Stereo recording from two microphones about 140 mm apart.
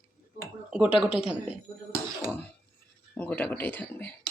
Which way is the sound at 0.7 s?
5° right (ahead or behind).